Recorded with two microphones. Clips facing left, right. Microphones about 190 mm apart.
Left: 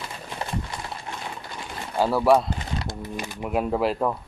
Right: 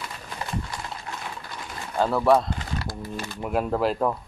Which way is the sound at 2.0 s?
5° left (ahead or behind).